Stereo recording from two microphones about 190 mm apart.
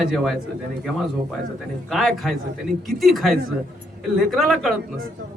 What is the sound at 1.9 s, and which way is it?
A man's voice, centre (ahead or behind).